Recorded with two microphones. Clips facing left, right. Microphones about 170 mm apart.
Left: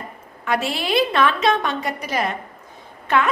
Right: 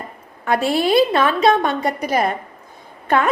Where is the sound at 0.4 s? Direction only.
45° right (ahead or behind); by 1.5 s 30° right (ahead or behind).